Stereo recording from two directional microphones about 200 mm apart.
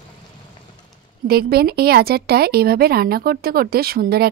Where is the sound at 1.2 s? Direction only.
50° right (ahead or behind).